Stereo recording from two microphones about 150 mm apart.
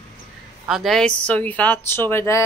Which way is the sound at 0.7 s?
Centre (ahead or behind).